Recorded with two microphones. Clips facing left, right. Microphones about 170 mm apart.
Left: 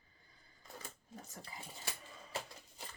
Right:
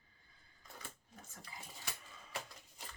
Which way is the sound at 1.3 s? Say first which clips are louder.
Left 3 dB; 30° left (ahead or behind).